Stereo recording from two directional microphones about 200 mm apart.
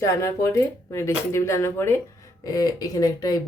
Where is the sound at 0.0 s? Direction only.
15° left (ahead or behind).